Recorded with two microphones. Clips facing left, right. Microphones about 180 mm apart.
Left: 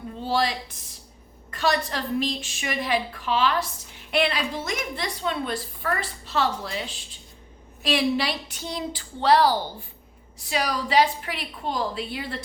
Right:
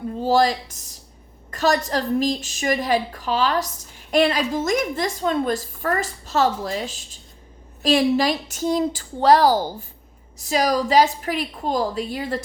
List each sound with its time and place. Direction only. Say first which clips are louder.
0.2 s a woman's voice: right 7 dB; 40° right (ahead or behind)